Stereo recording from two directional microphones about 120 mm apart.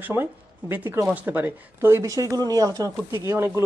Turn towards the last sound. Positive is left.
turn(degrees=-20)  # may be behind; listen again after turning